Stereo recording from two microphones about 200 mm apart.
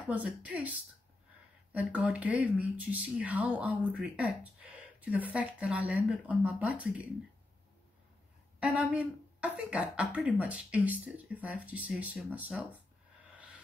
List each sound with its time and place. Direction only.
0.0 s speech: 5° right (ahead or behind)
8.5 s speech: 5° right (ahead or behind)